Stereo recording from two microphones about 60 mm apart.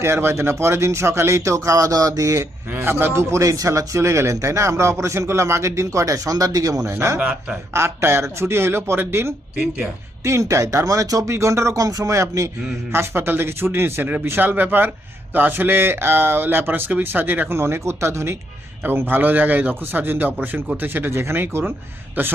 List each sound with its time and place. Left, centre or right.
0.0 s speech: right
2.6 s a man's voice: right
6.9 s speech: right
7.2 s speech: right
7.7 s speech: right
10.2 s a man's voice: right
11.3 s a man's voice: right
11.8 s speech: right
12.1 s a man's voice: right
12.9 s speech: right
17.5 s speech: right
18.8 s speech: right